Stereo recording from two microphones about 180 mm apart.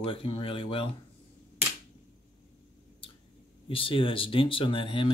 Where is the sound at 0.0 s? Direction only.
30° left (ahead or behind).